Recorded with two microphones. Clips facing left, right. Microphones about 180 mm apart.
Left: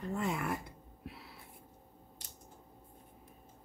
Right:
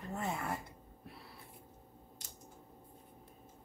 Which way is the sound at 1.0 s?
85° left.